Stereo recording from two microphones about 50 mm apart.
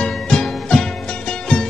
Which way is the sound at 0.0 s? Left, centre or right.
Centre.